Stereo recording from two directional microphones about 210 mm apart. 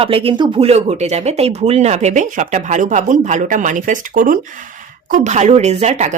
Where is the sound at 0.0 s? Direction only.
25° right (ahead or behind).